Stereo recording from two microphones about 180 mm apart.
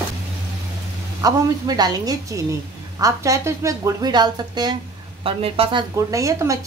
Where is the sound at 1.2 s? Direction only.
20° right (ahead or behind).